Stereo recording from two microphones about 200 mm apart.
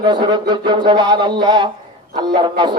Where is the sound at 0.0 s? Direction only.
20° right (ahead or behind).